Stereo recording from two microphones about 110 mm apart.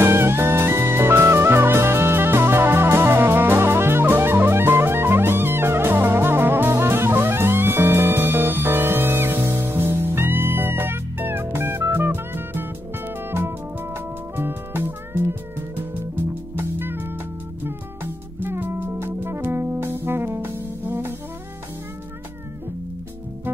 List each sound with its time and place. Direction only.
0.0 s music: 20° right (ahead or behind)
13.9 s music: 20° right (ahead or behind)
16.5 s music: 20° right (ahead or behind)